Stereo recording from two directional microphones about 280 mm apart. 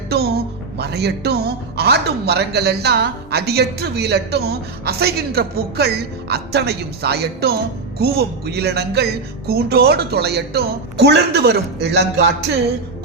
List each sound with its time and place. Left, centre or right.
0.1 s a woman's voice: right